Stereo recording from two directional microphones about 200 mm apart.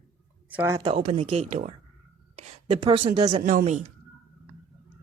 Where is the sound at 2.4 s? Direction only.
25° right (ahead or behind).